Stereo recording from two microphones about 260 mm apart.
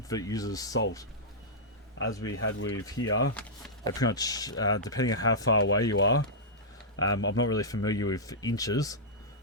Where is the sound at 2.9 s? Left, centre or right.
Left.